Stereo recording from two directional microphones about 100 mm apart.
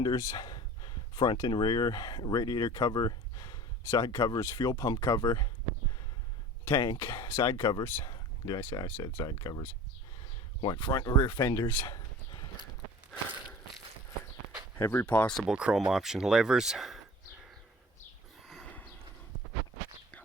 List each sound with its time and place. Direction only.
0.0 s a sound: 40° left (ahead or behind)
1.4 s speech: 45° left (ahead or behind)
6.7 s speech: 25° left (ahead or behind)
7.6 s speech: 50° left (ahead or behind)
10.9 s speech: 35° left (ahead or behind)
14.8 s speech: 20° left (ahead or behind)
15.3 s speech: centre (ahead or behind)
15.5 s speech: 10° right (ahead or behind)
18.4 s horse: centre (ahead or behind)